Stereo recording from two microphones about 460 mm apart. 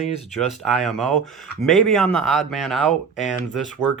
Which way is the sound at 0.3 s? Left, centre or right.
Centre.